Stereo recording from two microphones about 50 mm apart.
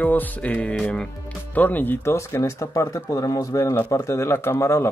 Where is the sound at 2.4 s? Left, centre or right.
Left.